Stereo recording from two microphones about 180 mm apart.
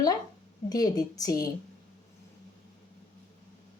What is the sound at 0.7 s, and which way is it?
Speech, 20° left (ahead or behind).